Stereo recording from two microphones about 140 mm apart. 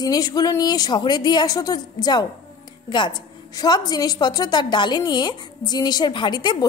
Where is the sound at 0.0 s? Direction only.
25° left (ahead or behind).